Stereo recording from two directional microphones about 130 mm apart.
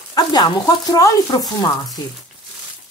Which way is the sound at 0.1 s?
30° left (ahead or behind).